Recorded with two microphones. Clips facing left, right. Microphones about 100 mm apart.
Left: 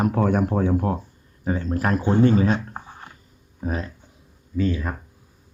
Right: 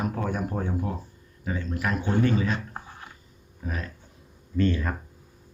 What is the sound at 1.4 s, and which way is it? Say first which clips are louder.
Speech: left 6 dB; 35° left (ahead or behind).